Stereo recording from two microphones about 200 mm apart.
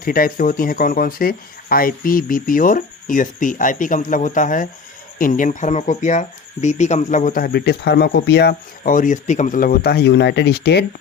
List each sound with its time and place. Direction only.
0.0 s speech: 45° left (ahead or behind)